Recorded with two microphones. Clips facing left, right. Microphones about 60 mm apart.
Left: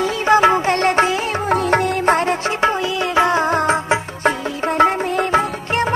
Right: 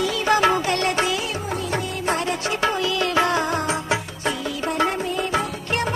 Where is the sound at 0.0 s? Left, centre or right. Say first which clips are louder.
Left 5 dB; left.